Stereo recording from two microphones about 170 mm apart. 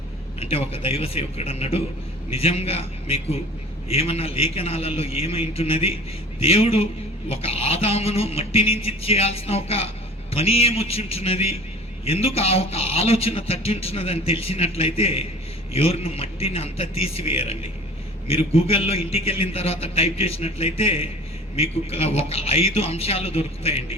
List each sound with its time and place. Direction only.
0.3 s speech: 35° left (ahead or behind)